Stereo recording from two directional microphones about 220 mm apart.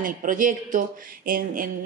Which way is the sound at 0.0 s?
35° right (ahead or behind).